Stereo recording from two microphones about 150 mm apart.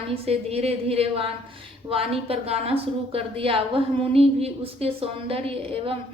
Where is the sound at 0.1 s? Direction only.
40° right (ahead or behind).